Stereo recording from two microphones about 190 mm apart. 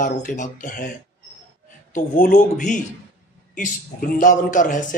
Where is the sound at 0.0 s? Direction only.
45° left (ahead or behind).